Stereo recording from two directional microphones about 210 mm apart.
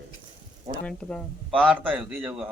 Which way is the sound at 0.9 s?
5° left (ahead or behind).